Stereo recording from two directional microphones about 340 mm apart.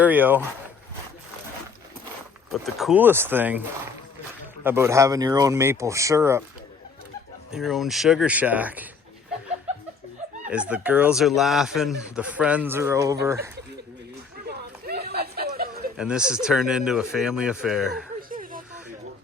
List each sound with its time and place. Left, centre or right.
0.0 s speech: centre
2.5 s speech: centre
4.6 s speech: centre
7.5 s speech: centre
10.5 s speech: centre
14.4 s chatter: right
16.0 s speech: centre
18.2 s a sound: right